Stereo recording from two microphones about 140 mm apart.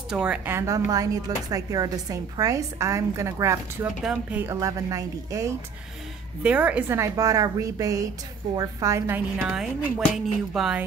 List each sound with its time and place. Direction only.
0.1 s speech: 5° right (ahead or behind)
0.6 s speech: 25° right (ahead or behind)
4.0 s speech: 5° right (ahead or behind)
4.6 s speech: 25° right (ahead or behind)
6.4 s speech: 10° right (ahead or behind)
7.0 s speech: 25° right (ahead or behind)
9.5 s speech: 5° right (ahead or behind)